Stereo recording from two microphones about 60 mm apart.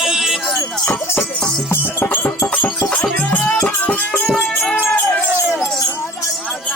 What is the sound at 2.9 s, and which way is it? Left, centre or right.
Music, left.